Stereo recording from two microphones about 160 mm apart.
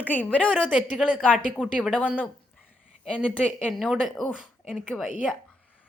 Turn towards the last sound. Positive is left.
turn(degrees=0)  # may be behind; listen again after turning